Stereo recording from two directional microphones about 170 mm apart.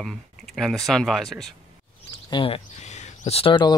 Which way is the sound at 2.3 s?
30° left (ahead or behind).